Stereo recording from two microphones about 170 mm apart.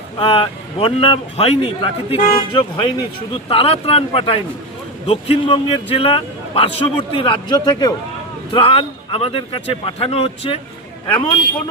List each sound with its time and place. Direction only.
0.2 s a man's voice: 30° left (ahead or behind)